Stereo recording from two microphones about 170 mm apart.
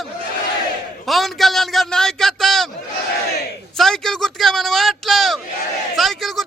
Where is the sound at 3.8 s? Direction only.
Centre (ahead or behind).